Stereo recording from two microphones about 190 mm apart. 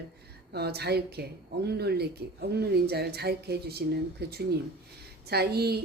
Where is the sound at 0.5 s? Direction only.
60° right (ahead or behind).